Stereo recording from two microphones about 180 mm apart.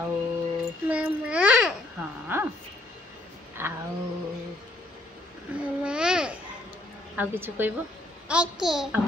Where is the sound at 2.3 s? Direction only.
10° right (ahead or behind).